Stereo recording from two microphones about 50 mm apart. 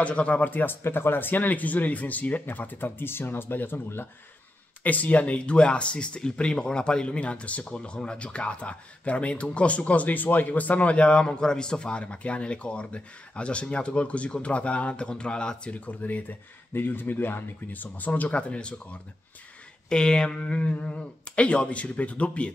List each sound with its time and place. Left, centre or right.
0.0 s speech: left
0.8 s speech: left
4.8 s speech: left
15.7 s speech: left; by 20.3 s centre
20.4 s speech: left